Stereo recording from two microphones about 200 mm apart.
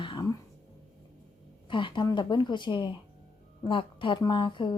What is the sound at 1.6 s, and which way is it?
A woman's voice, 25° left (ahead or behind).